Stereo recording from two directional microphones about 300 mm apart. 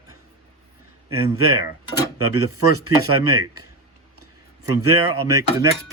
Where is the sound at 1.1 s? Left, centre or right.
Right.